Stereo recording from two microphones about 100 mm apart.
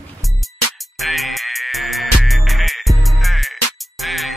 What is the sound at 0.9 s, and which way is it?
Music, centre (ahead or behind).